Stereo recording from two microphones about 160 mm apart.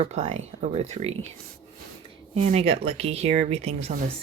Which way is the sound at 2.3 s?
40° right (ahead or behind).